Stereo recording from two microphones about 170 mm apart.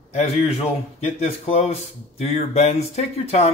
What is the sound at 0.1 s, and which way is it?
Speech, 40° left (ahead or behind).